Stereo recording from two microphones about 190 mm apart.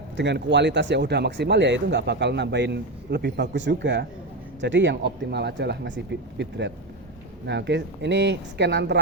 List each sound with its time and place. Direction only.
0.2 s speech: 65° right (ahead or behind)